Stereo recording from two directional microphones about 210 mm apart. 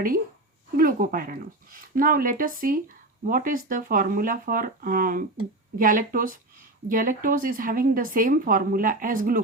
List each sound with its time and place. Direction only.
0.8 s speech: 40° right (ahead or behind)